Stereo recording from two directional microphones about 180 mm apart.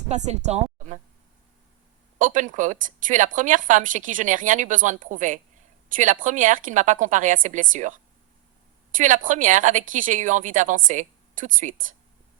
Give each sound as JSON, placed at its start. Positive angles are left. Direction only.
{"t": 0.1, "sound": "speech", "side_deg": -40}
{"t": 2.1, "sound": "a woman's voice", "side_deg": -45}